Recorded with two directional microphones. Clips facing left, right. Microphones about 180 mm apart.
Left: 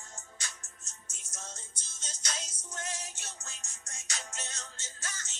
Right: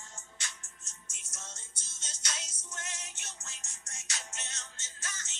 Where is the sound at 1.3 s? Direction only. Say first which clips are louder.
Left 4 dB; 30° left (ahead or behind).